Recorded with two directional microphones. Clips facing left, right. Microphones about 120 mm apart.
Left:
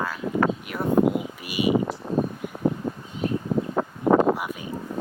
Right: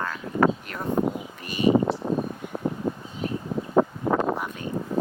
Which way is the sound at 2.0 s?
40° right (ahead or behind).